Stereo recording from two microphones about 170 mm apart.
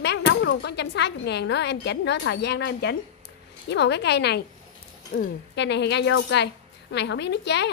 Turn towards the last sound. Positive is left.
turn(degrees=90)